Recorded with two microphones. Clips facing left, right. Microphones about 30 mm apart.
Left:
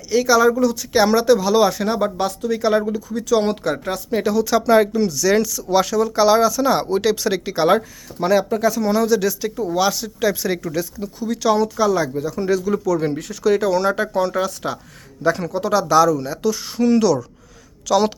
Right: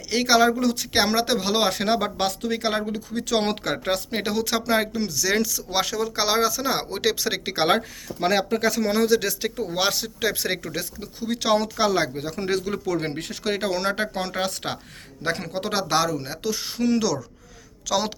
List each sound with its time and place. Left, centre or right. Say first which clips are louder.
0.1 s speech: left 4 dB; right
1.7 s speech: left 3 dB; right
2.5 s speech: left 7 dB; right
3.2 s speech: left 6 dB; right
4.1 s speech: left 6 dB; right
4.5 s speech: left 10 dB; centre
7.4 s speech: left 4 dB; right
8.9 s speech: left 2 dB; right
10.0 s speech: left 5 dB; right
11.6 s speech: left 4 dB; right
15.2 s a woman's voice: left 7 dB; right; by 18.1 s centre